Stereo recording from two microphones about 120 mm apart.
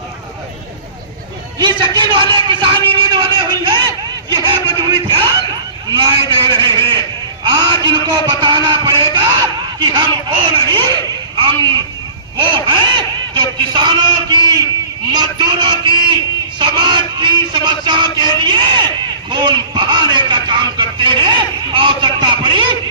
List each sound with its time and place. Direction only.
2.0 s a sound: 40° right (ahead or behind)
5.9 s music: 40° right (ahead or behind)
7.4 s a man's voice: 40° right (ahead or behind)
11.4 s a sound: 40° right (ahead or behind)
12.4 s a man's voice: 40° right (ahead or behind)
15.1 s music: 35° right (ahead or behind)
19.3 s a man's voice: 40° right (ahead or behind)